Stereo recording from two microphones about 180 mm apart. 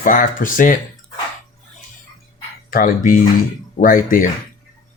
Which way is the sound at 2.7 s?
50° left (ahead or behind).